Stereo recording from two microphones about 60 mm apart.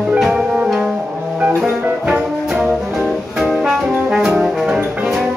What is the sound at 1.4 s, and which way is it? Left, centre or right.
Music, right.